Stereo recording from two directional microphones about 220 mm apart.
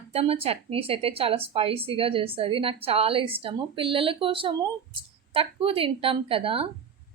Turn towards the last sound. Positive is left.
turn(degrees=-25)  # may be behind; listen again after turning